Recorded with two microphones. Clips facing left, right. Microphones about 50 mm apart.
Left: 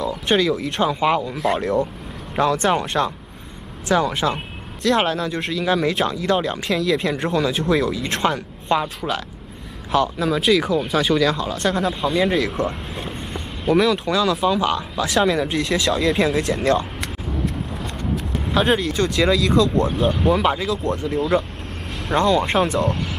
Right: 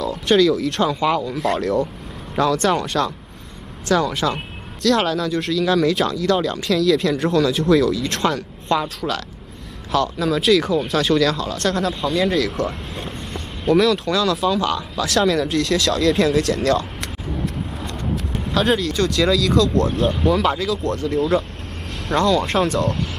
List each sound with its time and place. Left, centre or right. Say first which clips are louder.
0.3 s speech: right 4 dB; centre
1.2 s speech: even; centre
2.4 s speech: even; left
8.0 s speech: even; centre
18.5 s speech: even; centre